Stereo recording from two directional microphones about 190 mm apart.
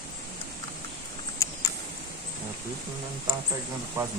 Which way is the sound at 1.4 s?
15° left (ahead or behind).